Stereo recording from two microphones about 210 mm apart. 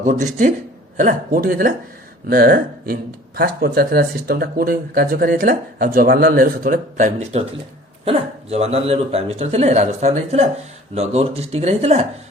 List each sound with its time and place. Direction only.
0.0 s speech: 35° right (ahead or behind)